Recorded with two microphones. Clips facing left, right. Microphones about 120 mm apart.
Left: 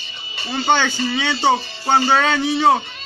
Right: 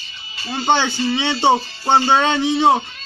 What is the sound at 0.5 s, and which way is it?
Speech, 15° right (ahead or behind).